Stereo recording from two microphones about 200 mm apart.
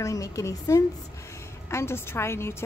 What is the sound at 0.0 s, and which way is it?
A woman's voice, 15° left (ahead or behind).